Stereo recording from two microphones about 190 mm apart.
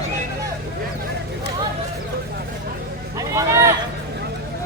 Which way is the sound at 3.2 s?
15° right (ahead or behind).